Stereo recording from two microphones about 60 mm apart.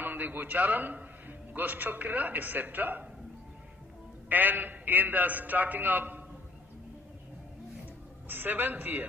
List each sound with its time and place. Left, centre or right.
0.0 s a man's voice: right
4.3 s a man's voice: right
8.3 s a man's voice: right